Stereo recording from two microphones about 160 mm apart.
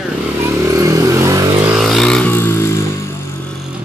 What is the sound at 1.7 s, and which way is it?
Vehicle, centre (ahead or behind).